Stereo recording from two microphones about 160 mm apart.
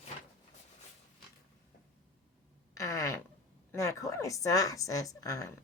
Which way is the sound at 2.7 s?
20° left (ahead or behind).